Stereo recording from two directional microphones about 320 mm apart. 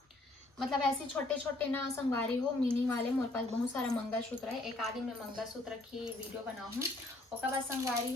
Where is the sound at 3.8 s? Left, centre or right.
Centre.